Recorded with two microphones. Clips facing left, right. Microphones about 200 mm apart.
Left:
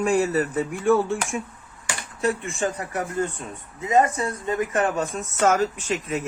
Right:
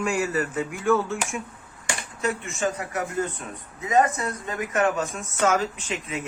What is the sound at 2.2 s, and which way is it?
Speech, 35° left (ahead or behind).